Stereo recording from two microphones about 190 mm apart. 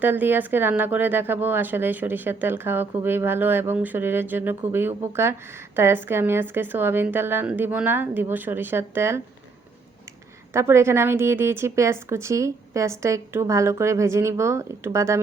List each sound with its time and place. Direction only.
0.0 s speech: 10° right (ahead or behind)
10.5 s speech: 15° right (ahead or behind)